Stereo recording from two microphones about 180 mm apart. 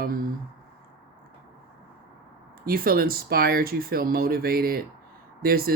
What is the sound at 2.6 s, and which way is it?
Speech, 55° right (ahead or behind).